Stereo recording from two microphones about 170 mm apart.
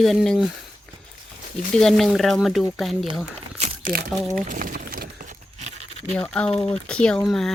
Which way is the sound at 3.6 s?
40° right (ahead or behind).